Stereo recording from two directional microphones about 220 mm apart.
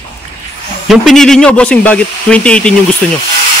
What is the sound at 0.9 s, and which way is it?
Speech, centre (ahead or behind).